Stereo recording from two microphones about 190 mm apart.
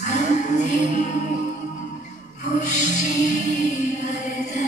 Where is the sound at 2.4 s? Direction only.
40° left (ahead or behind).